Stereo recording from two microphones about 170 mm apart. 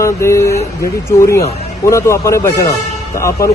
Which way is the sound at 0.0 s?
15° left (ahead or behind).